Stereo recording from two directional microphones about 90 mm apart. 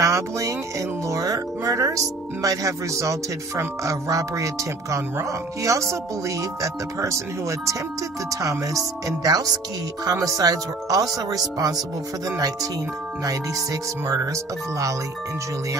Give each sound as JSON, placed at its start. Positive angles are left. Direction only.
{"t": 0.0, "sound": "speech", "side_deg": -35}